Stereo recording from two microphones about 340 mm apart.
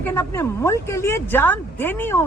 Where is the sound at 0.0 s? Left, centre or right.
Centre.